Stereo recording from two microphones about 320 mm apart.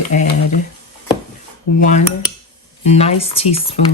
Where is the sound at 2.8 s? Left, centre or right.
Centre.